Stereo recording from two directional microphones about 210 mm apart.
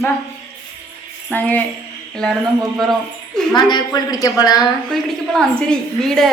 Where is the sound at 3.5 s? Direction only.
20° left (ahead or behind).